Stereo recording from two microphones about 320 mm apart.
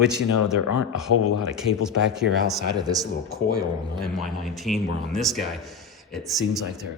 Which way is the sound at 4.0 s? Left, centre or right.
Centre.